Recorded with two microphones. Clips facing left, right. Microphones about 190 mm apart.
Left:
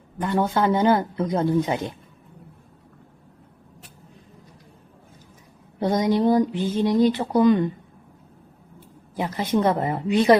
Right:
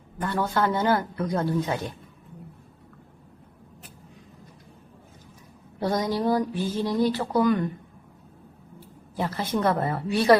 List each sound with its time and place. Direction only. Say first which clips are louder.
0.2 s speech: left 3 dB; 15° left (ahead or behind)
5.8 s speech: left 5 dB; 20° left (ahead or behind)
9.1 s a woman's voice: left 4 dB; 15° left (ahead or behind)